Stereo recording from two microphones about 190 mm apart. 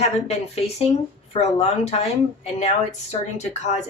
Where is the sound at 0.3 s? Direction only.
35° left (ahead or behind).